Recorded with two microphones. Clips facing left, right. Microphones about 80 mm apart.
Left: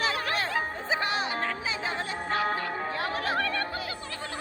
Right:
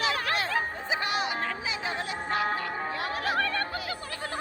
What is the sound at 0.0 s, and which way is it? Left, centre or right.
Music, left.